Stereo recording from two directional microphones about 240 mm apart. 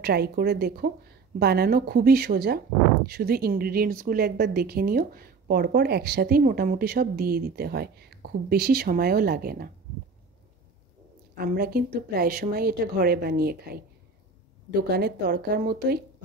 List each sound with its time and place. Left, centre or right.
0.0 s speech: right
11.3 s speech: right